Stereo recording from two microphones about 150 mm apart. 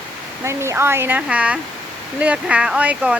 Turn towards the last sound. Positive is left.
turn(degrees=-10)  # may be behind; listen again after turning